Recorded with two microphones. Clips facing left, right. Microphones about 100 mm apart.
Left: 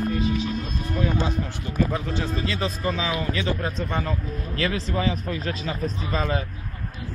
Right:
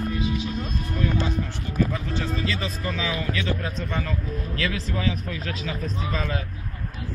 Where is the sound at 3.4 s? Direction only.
35° left (ahead or behind).